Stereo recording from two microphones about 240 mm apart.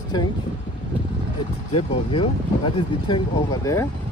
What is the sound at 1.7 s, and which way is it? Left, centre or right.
Speech, left.